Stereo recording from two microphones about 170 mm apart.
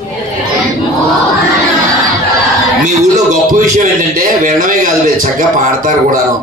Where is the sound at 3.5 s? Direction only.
55° right (ahead or behind).